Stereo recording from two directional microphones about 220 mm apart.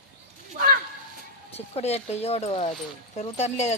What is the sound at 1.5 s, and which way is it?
Speech, 30° left (ahead or behind).